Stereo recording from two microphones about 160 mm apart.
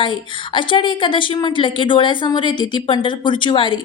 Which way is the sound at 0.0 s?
30° left (ahead or behind).